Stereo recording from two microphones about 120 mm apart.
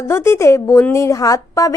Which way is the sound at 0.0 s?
20° left (ahead or behind).